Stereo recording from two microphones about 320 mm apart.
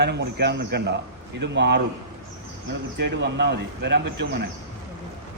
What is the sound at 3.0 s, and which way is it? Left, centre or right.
Speech, right.